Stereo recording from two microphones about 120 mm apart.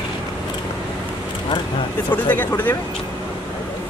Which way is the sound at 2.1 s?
15° left (ahead or behind).